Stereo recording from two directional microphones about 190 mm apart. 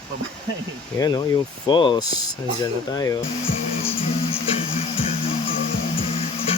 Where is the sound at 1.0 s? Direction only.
20° left (ahead or behind).